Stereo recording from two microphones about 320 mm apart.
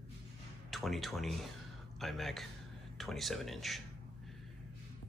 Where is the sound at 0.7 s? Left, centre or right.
Centre.